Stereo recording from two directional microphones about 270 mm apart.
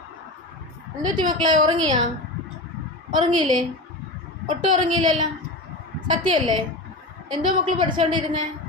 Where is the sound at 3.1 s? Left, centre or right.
Centre.